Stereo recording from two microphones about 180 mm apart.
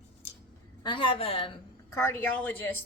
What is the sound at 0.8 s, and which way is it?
Speech, 25° left (ahead or behind).